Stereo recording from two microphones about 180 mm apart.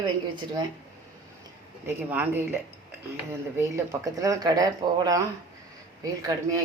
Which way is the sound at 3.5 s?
15° right (ahead or behind).